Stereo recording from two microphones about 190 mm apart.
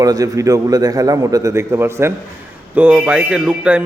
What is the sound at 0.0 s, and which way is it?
A man's voice, 20° right (ahead or behind).